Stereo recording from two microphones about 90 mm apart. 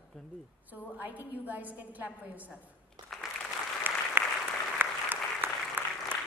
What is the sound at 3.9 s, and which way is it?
Applause, 25° right (ahead or behind).